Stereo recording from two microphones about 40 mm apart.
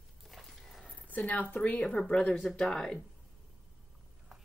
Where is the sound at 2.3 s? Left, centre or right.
Centre.